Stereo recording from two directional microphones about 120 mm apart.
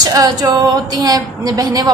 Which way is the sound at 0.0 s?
35° right (ahead or behind).